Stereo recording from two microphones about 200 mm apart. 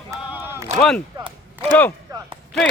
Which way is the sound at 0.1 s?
10° right (ahead or behind).